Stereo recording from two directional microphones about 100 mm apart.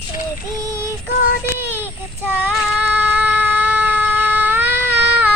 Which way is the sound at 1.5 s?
20° right (ahead or behind).